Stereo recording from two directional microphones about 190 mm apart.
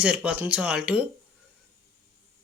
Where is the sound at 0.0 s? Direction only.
5° right (ahead or behind).